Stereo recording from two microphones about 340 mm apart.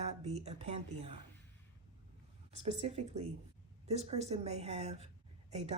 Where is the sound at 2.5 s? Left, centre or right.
Centre.